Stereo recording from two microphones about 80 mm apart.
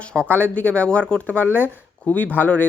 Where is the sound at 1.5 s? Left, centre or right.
Right.